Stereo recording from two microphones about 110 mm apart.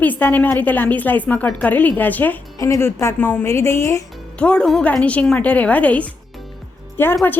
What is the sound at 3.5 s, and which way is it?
Speech, 25° left (ahead or behind).